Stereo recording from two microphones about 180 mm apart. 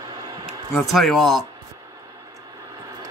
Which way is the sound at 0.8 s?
Centre (ahead or behind).